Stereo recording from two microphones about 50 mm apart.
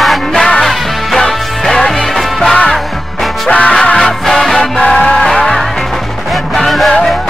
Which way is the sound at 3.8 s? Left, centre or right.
Left.